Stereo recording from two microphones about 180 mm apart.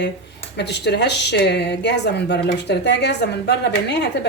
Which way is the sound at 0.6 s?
70° left (ahead or behind).